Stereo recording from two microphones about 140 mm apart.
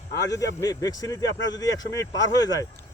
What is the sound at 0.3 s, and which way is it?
Speech, 25° left (ahead or behind).